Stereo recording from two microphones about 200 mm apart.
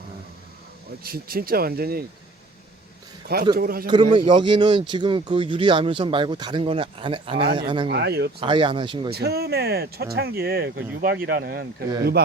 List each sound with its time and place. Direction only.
1.0 s speech: 50° right (ahead or behind)
3.5 s speech: 50° right (ahead or behind)
3.8 s speech: 25° right (ahead or behind)
7.9 s speech: 55° right (ahead or behind)
8.4 s speech: 25° right (ahead or behind)
9.0 s speech: 50° right (ahead or behind)